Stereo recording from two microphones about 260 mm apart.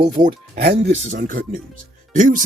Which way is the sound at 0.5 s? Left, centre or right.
Right.